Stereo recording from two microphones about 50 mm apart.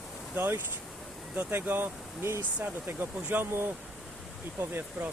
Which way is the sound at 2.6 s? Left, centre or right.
Right.